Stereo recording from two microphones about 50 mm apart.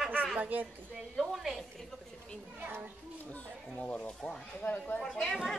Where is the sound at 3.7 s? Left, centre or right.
Left.